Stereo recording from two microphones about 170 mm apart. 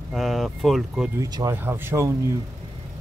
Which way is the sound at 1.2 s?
20° right (ahead or behind).